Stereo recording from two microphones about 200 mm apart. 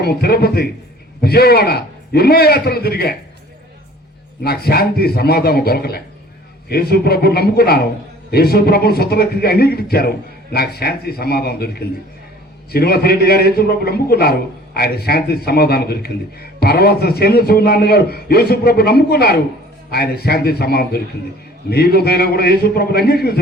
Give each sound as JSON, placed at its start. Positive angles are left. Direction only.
{"t": 0.0, "sound": "a man's voice", "side_deg": 50}
{"t": 4.4, "sound": "a man's voice", "side_deg": 50}